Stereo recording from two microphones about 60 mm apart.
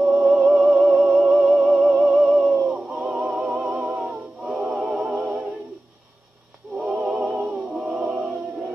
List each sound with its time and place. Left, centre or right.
0.2 s music: centre
2.4 s music: centre
6.8 s a sound: centre